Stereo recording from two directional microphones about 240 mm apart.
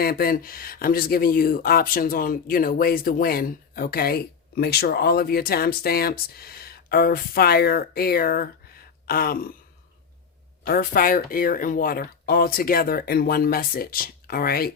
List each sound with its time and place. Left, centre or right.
0.0 s speech: left
10.7 s speech: left